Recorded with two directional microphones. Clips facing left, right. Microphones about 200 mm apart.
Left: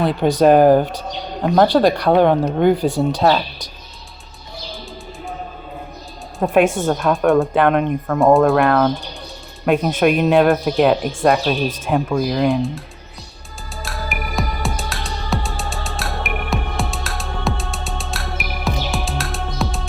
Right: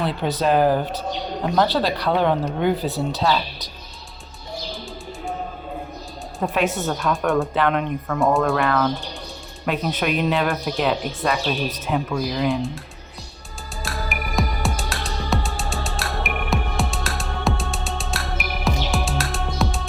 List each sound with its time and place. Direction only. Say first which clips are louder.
0.0 s speech: left 8 dB; 50° left (ahead or behind)
6.4 s speech: left 7 dB; 50° left (ahead or behind)
13.8 s music: left 1 dB; centre (ahead or behind)